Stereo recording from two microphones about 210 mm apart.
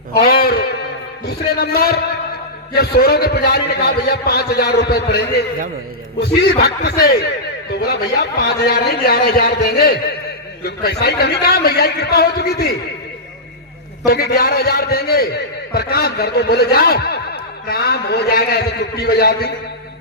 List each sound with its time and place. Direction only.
0.1 s a sound: 50° left (ahead or behind)
1.2 s a man's voice: 50° left (ahead or behind)
14.0 s a man's voice: 45° left (ahead or behind)